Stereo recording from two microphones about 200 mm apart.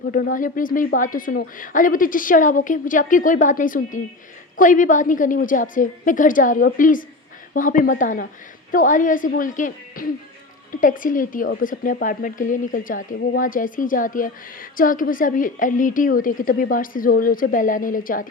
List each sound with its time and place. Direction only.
0.1 s a woman's voice: 45° left (ahead or behind)